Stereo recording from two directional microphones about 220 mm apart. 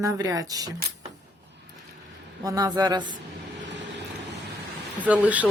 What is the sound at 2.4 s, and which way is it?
Speech, 15° right (ahead or behind).